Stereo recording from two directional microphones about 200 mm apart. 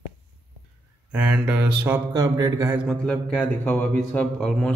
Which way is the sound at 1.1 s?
5° right (ahead or behind).